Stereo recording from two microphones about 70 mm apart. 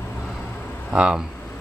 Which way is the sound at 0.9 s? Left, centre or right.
Centre.